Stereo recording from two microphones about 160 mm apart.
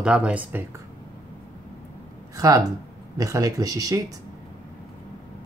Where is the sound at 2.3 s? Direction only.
20° right (ahead or behind).